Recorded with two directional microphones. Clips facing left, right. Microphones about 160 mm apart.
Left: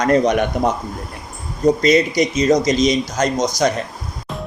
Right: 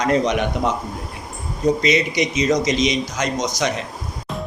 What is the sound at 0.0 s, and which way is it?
A man's voice, 50° left (ahead or behind).